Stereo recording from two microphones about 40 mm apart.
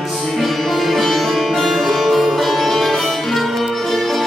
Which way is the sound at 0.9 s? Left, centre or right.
Centre.